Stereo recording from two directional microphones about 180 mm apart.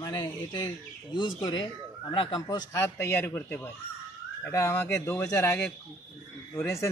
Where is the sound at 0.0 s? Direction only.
20° left (ahead or behind).